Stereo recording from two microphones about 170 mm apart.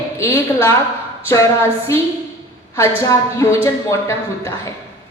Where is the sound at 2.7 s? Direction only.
15° left (ahead or behind).